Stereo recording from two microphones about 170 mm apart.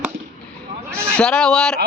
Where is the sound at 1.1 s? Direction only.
5° left (ahead or behind).